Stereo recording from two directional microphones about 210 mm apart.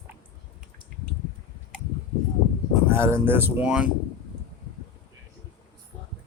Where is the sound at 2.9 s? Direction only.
10° right (ahead or behind).